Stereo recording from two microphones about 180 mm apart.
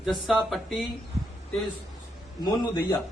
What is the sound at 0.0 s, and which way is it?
Speech, centre (ahead or behind).